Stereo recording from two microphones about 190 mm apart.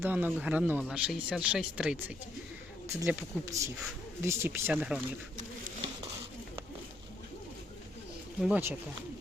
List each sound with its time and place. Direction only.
0.0 s speech: 10° right (ahead or behind)
8.4 s speech: 5° right (ahead or behind)